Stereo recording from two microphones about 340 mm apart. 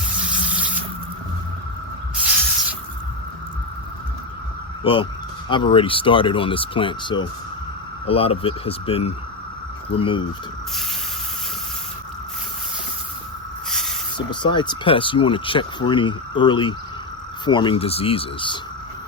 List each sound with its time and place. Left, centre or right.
0.3 s water tap: centre
4.8 s speech: centre
13.7 s a sound: centre
14.2 s speech: centre